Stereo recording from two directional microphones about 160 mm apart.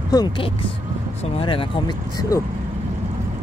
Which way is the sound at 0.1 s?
25° left (ahead or behind).